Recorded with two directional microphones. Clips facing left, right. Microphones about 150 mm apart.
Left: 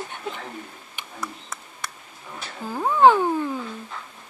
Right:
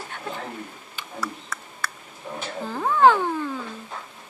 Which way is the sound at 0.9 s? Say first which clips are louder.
Right 2 dB; 20° left (ahead or behind).